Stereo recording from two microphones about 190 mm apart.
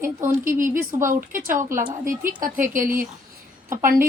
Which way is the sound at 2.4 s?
45° right (ahead or behind).